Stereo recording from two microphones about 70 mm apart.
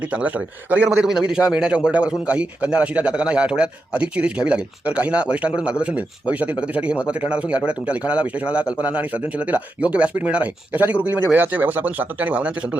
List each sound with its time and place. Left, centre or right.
0.1 s speech: centre
1.0 s a man's voice: centre